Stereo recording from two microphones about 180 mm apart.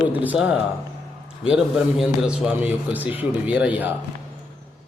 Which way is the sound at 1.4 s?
5° right (ahead or behind).